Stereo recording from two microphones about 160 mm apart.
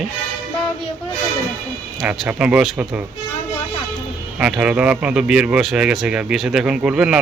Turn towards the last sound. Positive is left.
turn(degrees=-5)  # may be behind; listen again after turning